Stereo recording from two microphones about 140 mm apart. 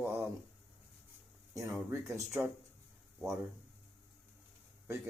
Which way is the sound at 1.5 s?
20° right (ahead or behind).